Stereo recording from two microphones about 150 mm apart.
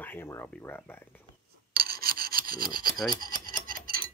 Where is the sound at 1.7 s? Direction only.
90° right.